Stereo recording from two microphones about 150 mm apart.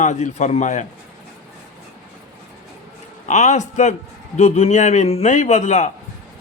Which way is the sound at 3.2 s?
50° left (ahead or behind).